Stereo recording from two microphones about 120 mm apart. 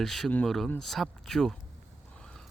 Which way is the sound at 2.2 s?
5° left (ahead or behind).